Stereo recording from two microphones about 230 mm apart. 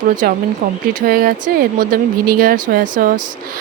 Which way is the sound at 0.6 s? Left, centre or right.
Right.